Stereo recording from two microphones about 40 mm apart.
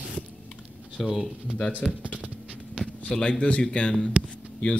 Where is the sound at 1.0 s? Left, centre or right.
Centre.